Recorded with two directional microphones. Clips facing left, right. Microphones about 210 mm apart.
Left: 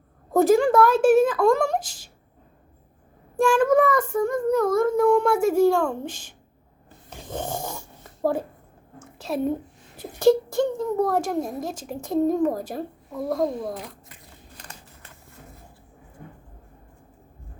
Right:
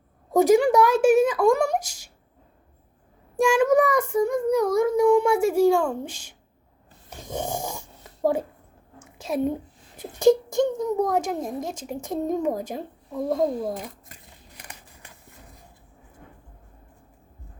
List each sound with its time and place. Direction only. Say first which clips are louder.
0.3 s child singing: even; 10° right (ahead or behind)
3.3 s child singing: even; 10° right (ahead or behind)
7.1 s dog: right 1 dB; 15° right (ahead or behind)
10.2 s child singing: even; 20° right (ahead or behind)
14.6 s scissors: right 2 dB; 15° right (ahead or behind)